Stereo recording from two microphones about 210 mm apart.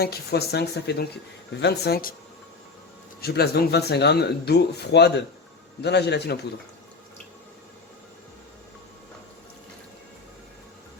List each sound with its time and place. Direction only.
0.0 s speech: 50° left (ahead or behind)
3.2 s speech: 50° left (ahead or behind)